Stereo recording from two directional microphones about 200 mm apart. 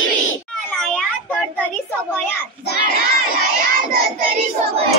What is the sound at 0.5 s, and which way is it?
A child's voice, 5° left (ahead or behind).